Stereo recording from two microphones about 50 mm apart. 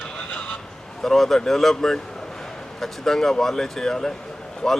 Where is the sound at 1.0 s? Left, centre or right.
Centre.